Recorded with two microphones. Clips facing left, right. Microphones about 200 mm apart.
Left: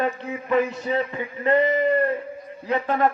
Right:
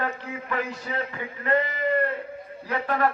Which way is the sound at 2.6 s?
20° left (ahead or behind).